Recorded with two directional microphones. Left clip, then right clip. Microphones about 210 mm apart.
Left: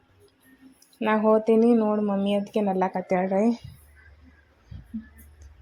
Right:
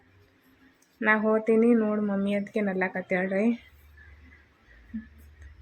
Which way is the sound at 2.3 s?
20° left (ahead or behind).